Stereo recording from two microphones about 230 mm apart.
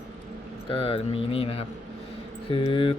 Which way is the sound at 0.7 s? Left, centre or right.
Left.